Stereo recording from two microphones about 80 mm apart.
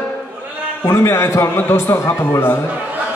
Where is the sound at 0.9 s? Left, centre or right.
Left.